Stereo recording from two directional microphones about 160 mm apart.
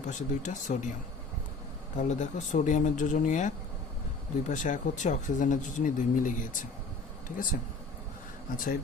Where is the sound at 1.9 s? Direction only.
50° left (ahead or behind).